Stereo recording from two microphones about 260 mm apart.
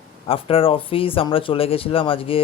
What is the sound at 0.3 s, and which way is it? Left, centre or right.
Speech, left.